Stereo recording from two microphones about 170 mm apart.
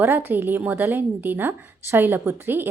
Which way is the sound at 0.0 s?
10° right (ahead or behind).